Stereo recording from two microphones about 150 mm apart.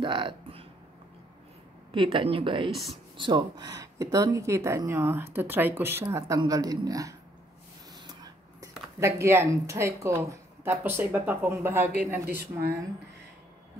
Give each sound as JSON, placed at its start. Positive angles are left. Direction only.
{"t": 0.0, "sound": "a sound", "side_deg": -35}
{"t": 1.9, "sound": "speech", "side_deg": -35}
{"t": 12.3, "sound": "a woman's voice", "side_deg": -90}